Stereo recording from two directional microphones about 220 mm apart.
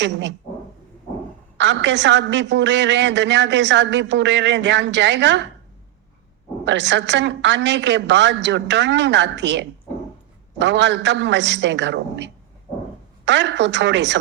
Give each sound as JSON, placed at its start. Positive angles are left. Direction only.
{"t": 0.0, "sound": "a woman's voice", "side_deg": -55}
{"t": 1.5, "sound": "a woman's voice", "side_deg": -55}
{"t": 6.7, "sound": "a woman's voice", "side_deg": -55}